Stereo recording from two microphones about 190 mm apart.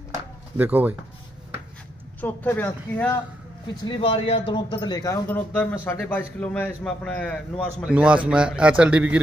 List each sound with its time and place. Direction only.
0.6 s speech: 10° right (ahead or behind)
2.2 s a man's voice: 10° left (ahead or behind)
3.8 s a man's voice: 25° left (ahead or behind); by 7.3 s 5° left (ahead or behind)
7.8 s a man's voice: 5° right (ahead or behind)